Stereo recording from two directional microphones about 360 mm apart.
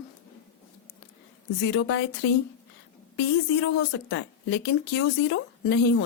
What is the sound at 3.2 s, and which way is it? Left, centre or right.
A woman's voice, left.